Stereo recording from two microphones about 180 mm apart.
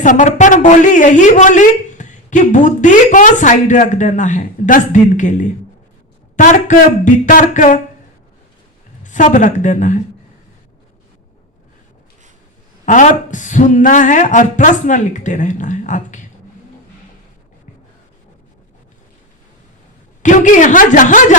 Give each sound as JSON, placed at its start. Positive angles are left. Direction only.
{"t": 0.0, "sound": "a woman's voice", "side_deg": 45}
{"t": 9.0, "sound": "a woman's voice", "side_deg": 45}
{"t": 12.8, "sound": "a woman's voice", "side_deg": 45}
{"t": 20.2, "sound": "a woman's voice", "side_deg": 45}